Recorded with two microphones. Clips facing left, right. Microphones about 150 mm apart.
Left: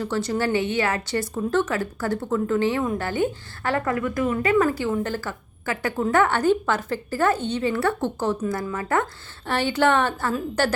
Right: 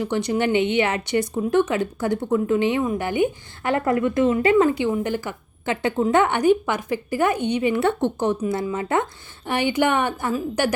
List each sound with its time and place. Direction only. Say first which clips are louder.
0.0 s a woman's voice: right 2 dB; 15° right (ahead or behind)